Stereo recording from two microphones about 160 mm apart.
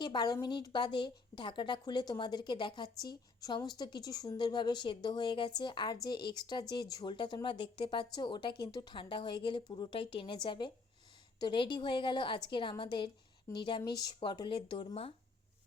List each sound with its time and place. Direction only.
0.0 s speech: 25° left (ahead or behind)